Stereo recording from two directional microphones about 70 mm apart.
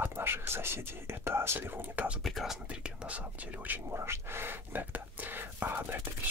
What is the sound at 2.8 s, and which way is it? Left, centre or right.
Speech, centre.